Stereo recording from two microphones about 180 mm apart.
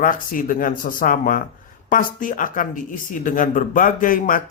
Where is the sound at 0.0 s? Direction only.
50° left (ahead or behind).